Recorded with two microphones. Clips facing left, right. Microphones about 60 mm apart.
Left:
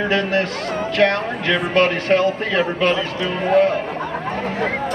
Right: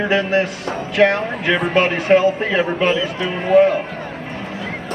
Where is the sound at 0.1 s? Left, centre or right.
Centre.